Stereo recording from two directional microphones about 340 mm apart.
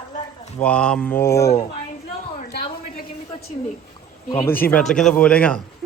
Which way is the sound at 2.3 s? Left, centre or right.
Left.